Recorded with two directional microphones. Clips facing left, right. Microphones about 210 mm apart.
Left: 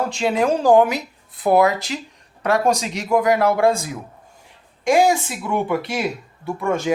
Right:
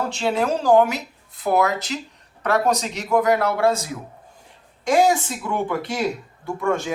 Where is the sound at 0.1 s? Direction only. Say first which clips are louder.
Left 3 dB; 15° left (ahead or behind).